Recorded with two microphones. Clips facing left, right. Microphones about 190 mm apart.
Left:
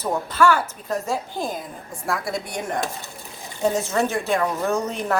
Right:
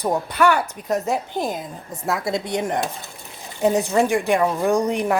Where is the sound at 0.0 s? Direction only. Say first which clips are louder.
Right 1 dB; 15° right (ahead or behind).